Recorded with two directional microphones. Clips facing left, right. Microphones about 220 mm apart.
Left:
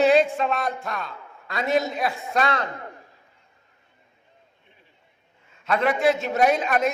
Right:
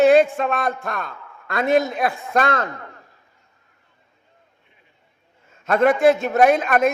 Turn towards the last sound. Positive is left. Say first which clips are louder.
# right 4 dB
turn(degrees=-50)  # may be behind; listen again after turning